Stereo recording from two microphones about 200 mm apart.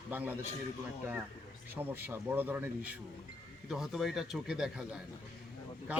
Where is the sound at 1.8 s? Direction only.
10° right (ahead or behind).